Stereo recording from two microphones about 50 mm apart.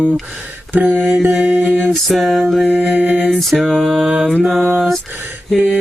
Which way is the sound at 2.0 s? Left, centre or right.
Centre.